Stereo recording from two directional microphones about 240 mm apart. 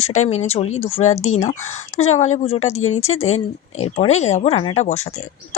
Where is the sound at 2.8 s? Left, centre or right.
Left.